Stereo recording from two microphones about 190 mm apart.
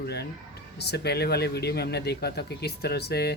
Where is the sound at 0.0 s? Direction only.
60° left (ahead or behind).